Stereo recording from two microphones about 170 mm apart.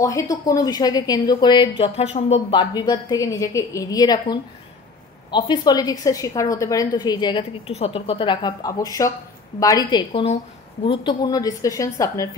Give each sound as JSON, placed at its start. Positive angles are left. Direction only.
{"t": 0.0, "sound": "a woman's voice", "side_deg": 20}
{"t": 2.0, "sound": "speech", "side_deg": 40}
{"t": 2.5, "sound": "a woman's voice", "side_deg": 25}